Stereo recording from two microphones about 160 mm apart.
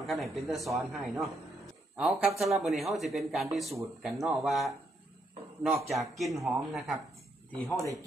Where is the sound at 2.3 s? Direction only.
40° right (ahead or behind).